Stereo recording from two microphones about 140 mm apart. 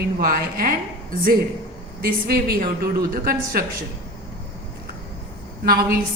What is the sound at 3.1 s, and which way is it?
Speech, 90° right.